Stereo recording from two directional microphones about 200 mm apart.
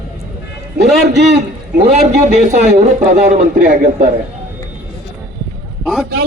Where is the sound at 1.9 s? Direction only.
35° right (ahead or behind).